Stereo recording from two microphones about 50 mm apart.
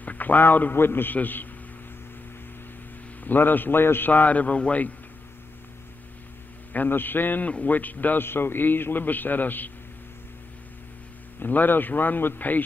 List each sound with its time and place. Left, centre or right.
0.0 s a man's voice: left
3.3 s a man's voice: left
4.1 s a man's voice: left
6.7 s a man's voice: left
8.2 s a man's voice: left
11.3 s a man's voice: left